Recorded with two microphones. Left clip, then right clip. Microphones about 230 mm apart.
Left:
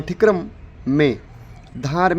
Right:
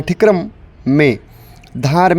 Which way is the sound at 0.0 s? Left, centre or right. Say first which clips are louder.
Right 4 dB; right.